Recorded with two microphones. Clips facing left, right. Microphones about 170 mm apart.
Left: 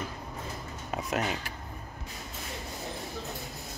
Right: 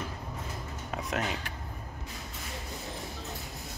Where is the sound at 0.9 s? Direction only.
5° left (ahead or behind).